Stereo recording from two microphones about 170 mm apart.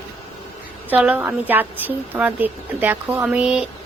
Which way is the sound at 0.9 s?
10° right (ahead or behind).